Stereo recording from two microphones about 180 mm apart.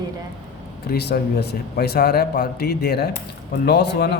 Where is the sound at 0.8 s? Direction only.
60° left (ahead or behind).